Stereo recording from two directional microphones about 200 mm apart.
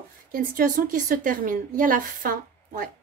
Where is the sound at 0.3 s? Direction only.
45° right (ahead or behind).